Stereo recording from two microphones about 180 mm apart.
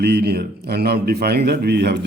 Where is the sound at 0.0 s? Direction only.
65° right (ahead or behind).